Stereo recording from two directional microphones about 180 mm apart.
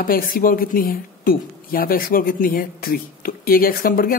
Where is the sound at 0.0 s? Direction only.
50° left (ahead or behind).